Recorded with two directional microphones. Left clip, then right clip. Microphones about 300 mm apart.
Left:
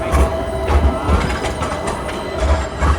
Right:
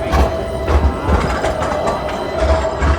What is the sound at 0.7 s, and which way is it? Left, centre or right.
Music, right.